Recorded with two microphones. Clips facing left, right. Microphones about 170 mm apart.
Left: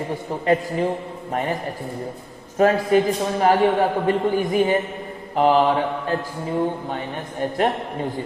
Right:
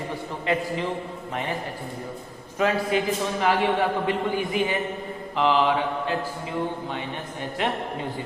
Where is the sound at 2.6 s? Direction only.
45° left (ahead or behind).